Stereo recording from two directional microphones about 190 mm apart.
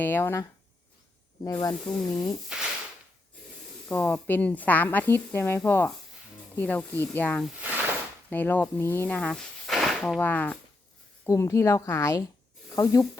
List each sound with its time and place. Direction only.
0.0 s speech: 10° left (ahead or behind)
1.5 s speech: 20° left (ahead or behind)
2.2 s speech: centre (ahead or behind)
3.8 s speech: 10° left (ahead or behind)
7.6 s a sound: 10° right (ahead or behind)
8.3 s speech: 10° left (ahead or behind)